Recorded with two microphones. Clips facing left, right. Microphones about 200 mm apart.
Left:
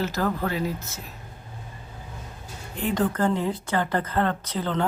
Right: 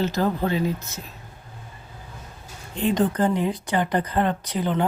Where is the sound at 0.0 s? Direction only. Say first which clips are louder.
Right 3 dB; 20° right (ahead or behind).